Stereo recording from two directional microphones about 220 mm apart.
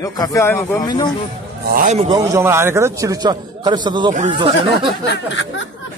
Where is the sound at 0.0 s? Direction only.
15° left (ahead or behind).